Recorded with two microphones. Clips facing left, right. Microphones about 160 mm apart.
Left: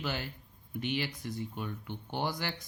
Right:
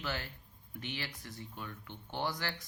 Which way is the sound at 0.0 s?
15° left (ahead or behind).